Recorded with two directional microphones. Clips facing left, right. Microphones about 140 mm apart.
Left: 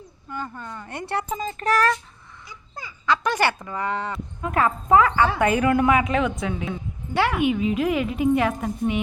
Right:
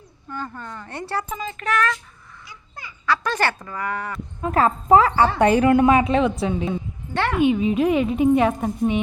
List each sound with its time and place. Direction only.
0.3 s speech: 15° left (ahead or behind)
1.4 s child singing: 40° left (ahead or behind)
3.1 s speech: 15° left (ahead or behind)
4.4 s a woman's voice: 35° right (ahead or behind)
7.1 s speech: 10° left (ahead or behind)
7.4 s a woman's voice: 30° right (ahead or behind)